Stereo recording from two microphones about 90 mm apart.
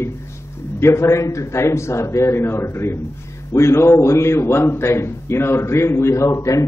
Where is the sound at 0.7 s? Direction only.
30° left (ahead or behind).